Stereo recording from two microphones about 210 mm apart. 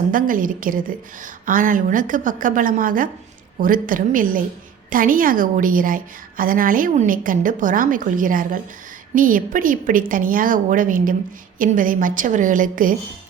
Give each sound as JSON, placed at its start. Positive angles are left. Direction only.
{"t": 0.1, "sound": "a woman's voice", "side_deg": -40}